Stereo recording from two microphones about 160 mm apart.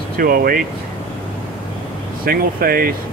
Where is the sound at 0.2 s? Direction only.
65° right (ahead or behind).